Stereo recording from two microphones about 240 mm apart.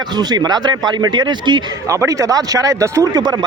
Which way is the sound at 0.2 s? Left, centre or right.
Centre.